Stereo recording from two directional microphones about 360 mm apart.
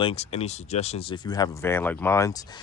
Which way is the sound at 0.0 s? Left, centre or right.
Centre.